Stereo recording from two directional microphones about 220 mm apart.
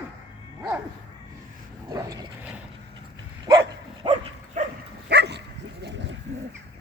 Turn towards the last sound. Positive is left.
turn(degrees=-50)  # may be behind; listen again after turning